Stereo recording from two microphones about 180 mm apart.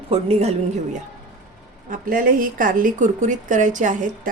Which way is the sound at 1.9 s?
50° right (ahead or behind).